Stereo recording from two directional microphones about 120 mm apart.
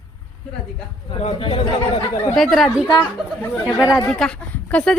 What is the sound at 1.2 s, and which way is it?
Speech, 55° left (ahead or behind).